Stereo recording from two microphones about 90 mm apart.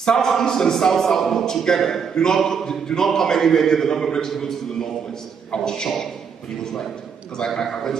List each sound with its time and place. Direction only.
0.0 s a man's voice: 5° left (ahead or behind)
7.3 s a man's voice: 5° left (ahead or behind)